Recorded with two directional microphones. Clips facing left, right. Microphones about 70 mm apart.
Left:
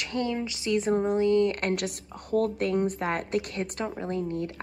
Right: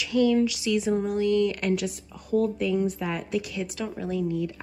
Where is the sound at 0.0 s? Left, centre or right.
Left.